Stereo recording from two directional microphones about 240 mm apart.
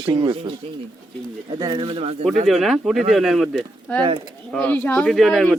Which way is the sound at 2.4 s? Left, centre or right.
Centre.